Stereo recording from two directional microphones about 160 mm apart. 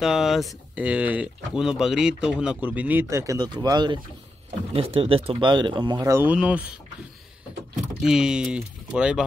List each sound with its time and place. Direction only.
0.0 s speech: centre (ahead or behind); by 4.0 s 25° right (ahead or behind)
4.7 s speech: 35° right (ahead or behind); by 6.2 s 20° right (ahead or behind)
6.2 s speech: 5° right (ahead or behind)
7.7 s speech: 5° right (ahead or behind)